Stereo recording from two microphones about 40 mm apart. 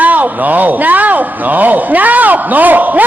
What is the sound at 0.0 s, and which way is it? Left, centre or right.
A man's voice, right.